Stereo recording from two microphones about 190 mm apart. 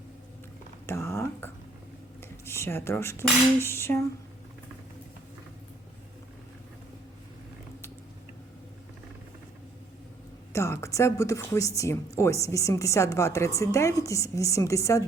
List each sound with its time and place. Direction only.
0.9 s a sound: 15° left (ahead or behind)
2.2 s speech: 15° left (ahead or behind)
10.5 s speech: 15° left (ahead or behind)